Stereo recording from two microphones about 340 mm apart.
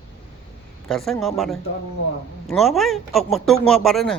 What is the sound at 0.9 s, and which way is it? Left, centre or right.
A man's voice, centre.